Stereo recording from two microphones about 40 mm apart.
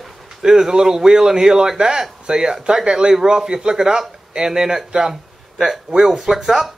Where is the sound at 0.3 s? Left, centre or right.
Centre.